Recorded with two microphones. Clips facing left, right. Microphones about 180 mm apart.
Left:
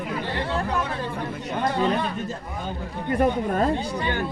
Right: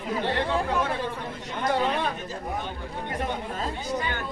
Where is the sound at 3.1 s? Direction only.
55° left (ahead or behind).